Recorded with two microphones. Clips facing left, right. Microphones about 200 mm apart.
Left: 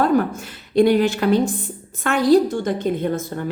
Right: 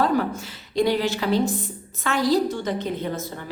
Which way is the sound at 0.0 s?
50° left (ahead or behind).